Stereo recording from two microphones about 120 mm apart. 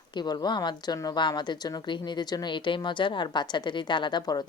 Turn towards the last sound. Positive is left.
turn(degrees=35)  # may be behind; listen again after turning